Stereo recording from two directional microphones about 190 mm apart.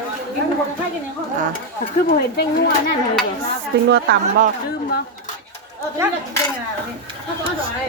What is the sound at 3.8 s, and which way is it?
Speech, 60° right (ahead or behind).